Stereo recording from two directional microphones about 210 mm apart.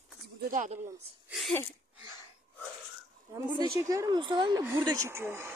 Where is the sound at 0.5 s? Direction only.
35° right (ahead or behind).